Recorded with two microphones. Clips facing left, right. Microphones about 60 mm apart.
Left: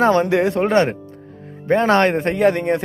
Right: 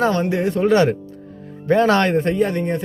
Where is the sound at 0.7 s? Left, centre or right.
Left.